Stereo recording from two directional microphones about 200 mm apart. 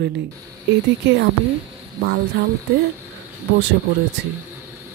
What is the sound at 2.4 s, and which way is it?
Speech, 55° right (ahead or behind).